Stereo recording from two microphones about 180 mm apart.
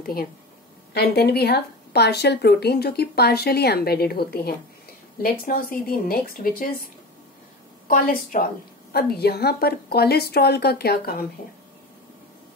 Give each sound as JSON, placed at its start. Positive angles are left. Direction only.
{"t": 0.0, "sound": "speech", "side_deg": 55}
{"t": 7.9, "sound": "speech", "side_deg": 50}